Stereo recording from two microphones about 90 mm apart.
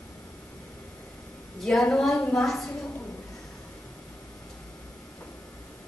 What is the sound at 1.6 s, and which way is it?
A woman's voice, 5° left (ahead or behind).